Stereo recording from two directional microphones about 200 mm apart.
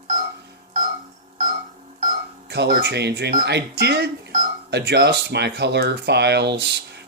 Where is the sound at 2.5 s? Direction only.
55° right (ahead or behind).